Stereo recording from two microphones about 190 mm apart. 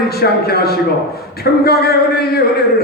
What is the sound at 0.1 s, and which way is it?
A man's voice, 55° left (ahead or behind).